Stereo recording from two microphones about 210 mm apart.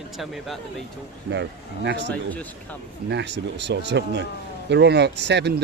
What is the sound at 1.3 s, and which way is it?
Speech, 55° right (ahead or behind).